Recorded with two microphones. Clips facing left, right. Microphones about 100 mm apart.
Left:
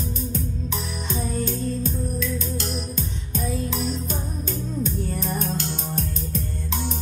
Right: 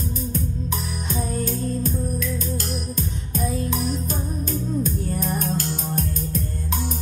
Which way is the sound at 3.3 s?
45° right (ahead or behind).